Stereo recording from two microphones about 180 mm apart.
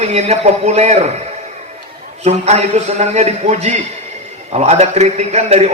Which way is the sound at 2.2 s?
35° right (ahead or behind).